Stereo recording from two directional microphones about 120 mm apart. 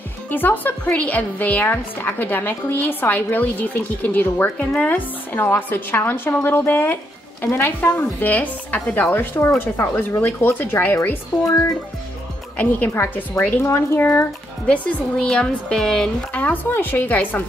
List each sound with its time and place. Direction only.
0.3 s a woman's voice: 15° left (ahead or behind)
12.5 s a woman's voice: 15° left (ahead or behind)
14.7 s a woman's voice: 10° left (ahead or behind)